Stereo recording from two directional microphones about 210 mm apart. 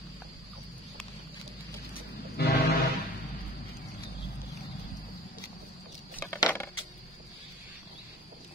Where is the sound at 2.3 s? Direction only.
50° left (ahead or behind).